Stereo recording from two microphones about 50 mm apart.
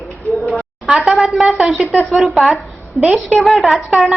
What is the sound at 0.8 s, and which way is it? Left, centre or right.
A woman's voice, centre.